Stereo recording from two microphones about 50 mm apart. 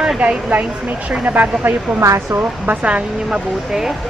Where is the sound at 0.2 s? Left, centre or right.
Right.